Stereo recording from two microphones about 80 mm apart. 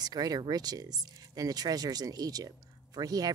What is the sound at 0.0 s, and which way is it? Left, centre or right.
Speech, right.